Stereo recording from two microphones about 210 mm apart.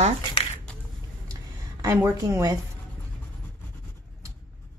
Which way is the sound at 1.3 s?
15° right (ahead or behind).